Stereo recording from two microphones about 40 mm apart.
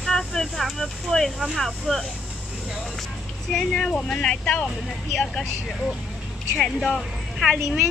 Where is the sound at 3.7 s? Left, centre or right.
Left.